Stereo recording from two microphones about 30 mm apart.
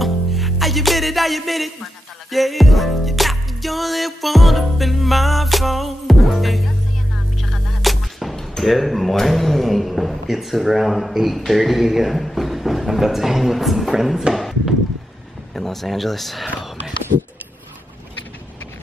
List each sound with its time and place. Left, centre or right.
0.0 s music: centre
8.6 s speech: centre
14.3 s a sound: centre
15.5 s speech: centre